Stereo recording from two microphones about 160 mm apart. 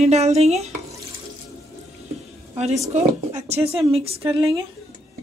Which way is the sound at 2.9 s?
45° right (ahead or behind).